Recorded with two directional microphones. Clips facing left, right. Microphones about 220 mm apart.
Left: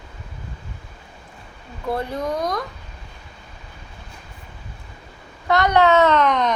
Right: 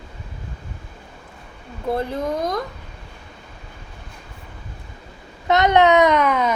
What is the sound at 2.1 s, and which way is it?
Speech, 25° right (ahead or behind).